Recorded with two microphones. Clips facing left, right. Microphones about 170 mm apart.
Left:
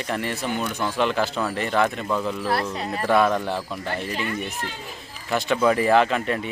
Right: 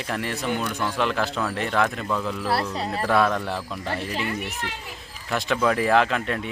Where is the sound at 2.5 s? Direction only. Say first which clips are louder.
Right 2 dB; 30° right (ahead or behind).